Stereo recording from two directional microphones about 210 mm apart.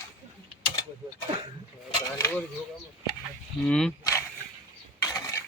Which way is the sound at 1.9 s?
10° left (ahead or behind).